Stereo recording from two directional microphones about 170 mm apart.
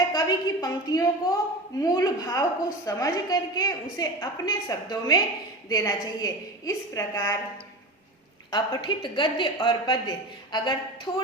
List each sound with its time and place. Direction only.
0.1 s a woman's voice: 25° left (ahead or behind)
8.4 s a woman's voice: 25° left (ahead or behind)